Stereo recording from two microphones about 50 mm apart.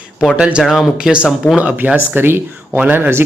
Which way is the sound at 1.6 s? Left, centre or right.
Right.